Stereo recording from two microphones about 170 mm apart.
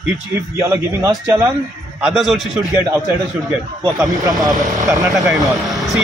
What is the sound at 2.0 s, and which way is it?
Speech, 5° right (ahead or behind).